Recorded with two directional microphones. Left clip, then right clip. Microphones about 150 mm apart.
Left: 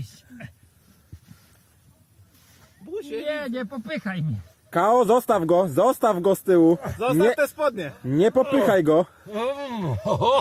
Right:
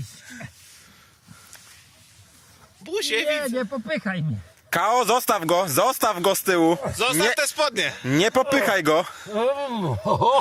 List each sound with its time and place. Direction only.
2.9 s speech: 35° left (ahead or behind)
4.8 s speech: 10° right (ahead or behind)
7.3 s speech: 40° left (ahead or behind)
8.1 s speech: 10° right (ahead or behind)
9.2 s speech: 30° left (ahead or behind)